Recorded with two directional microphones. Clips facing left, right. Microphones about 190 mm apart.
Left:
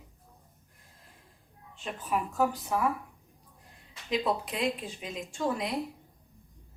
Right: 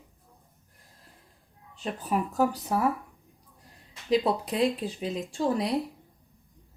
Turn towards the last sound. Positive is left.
turn(degrees=-35)  # may be behind; listen again after turning